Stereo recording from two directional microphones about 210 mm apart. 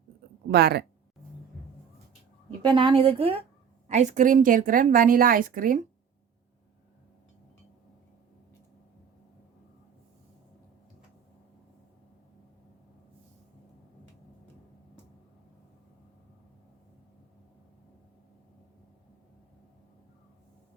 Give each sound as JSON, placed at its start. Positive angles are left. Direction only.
{"t": 0.4, "sound": "speech", "side_deg": -50}
{"t": 2.6, "sound": "a woman's voice", "side_deg": -20}